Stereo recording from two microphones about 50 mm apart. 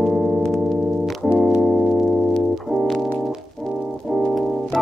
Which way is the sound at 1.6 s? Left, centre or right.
Centre.